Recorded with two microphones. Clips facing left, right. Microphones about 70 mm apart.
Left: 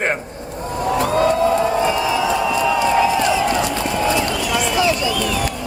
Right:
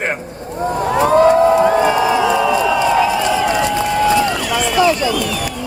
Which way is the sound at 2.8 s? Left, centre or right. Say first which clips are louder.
Right 2 dB; left.